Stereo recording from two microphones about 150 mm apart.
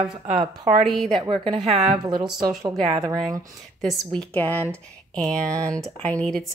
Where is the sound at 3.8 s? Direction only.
5° left (ahead or behind).